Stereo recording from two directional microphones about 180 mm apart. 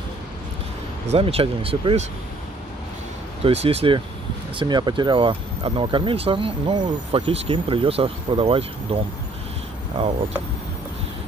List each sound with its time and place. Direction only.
1.0 s speech: 35° right (ahead or behind)
3.4 s speech: 35° right (ahead or behind)